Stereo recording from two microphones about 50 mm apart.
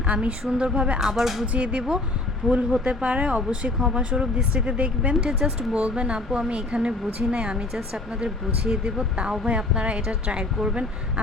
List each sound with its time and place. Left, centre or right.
0.1 s speech: right; by 1.5 s centre
1.5 s speech: right
3.8 s speech: centre